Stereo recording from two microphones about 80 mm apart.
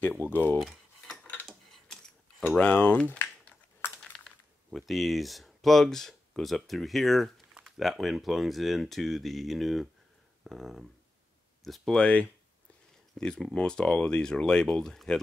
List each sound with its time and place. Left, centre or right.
0.3 s speech: left
0.6 s cutlery: centre
2.5 s speech: centre
3.2 s a sound: left
4.7 s speech: centre
13.2 s speech: centre